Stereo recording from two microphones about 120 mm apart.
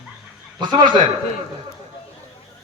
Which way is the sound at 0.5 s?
40° right (ahead or behind).